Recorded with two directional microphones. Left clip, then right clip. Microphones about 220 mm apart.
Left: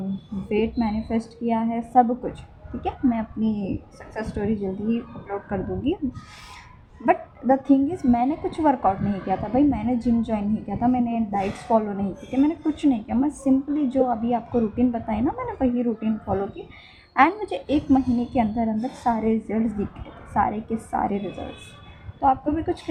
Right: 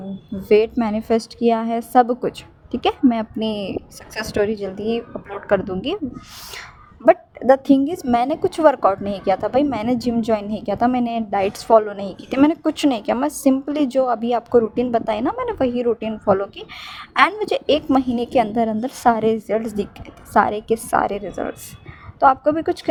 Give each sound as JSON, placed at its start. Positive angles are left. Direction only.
{"t": 0.4, "sound": "a woman's voice", "side_deg": -55}
{"t": 7.0, "sound": "a woman's voice", "side_deg": -50}